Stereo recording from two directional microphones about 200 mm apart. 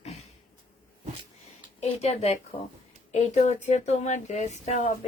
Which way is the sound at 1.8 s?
30° left (ahead or behind).